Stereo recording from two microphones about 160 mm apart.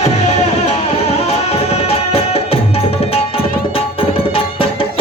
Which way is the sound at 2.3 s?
35° left (ahead or behind).